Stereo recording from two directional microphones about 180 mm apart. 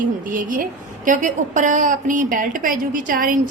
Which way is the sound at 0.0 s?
50° right (ahead or behind).